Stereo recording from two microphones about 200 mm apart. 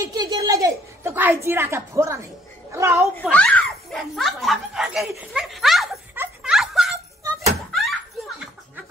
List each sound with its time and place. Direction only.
0.0 s a woman's voice: 20° right (ahead or behind)
3.2 s speech: 5° left (ahead or behind)
6.1 s music: 5° right (ahead or behind)